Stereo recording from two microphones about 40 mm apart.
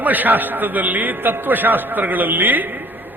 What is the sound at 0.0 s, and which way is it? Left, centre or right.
A man's voice, right.